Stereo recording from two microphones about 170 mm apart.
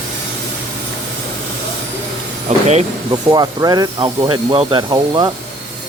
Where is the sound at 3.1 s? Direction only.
25° right (ahead or behind).